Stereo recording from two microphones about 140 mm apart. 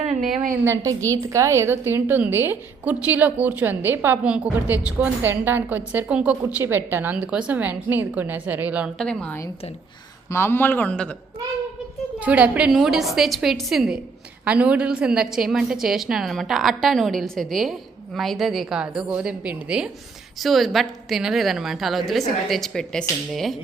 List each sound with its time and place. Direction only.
0.0 s a woman's voice: 60° right (ahead or behind)
0.6 s a woman's voice: 20° right (ahead or behind)
9.0 s speech: 5° left (ahead or behind)
10.2 s speech: 15° left (ahead or behind)
12.2 s a woman's voice: 10° right (ahead or behind)